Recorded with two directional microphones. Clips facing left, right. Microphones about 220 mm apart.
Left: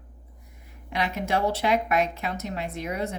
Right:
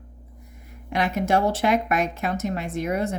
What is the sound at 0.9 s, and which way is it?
Speech, 45° right (ahead or behind).